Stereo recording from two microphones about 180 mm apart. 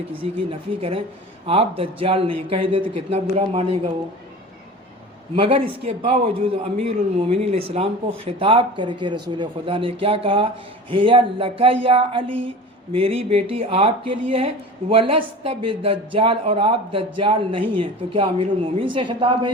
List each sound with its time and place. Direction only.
0.8 s speech: 30° right (ahead or behind)
5.4 s speech: 30° right (ahead or behind)